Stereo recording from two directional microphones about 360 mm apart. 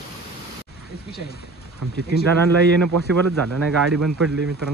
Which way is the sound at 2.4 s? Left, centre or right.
Right.